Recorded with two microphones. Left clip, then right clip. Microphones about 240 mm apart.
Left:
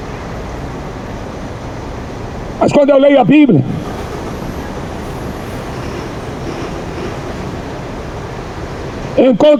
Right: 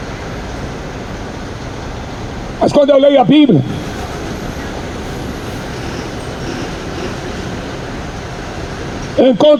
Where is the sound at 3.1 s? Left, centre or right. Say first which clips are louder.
Even; left.